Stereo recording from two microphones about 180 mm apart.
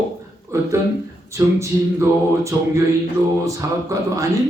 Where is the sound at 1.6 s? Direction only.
15° right (ahead or behind).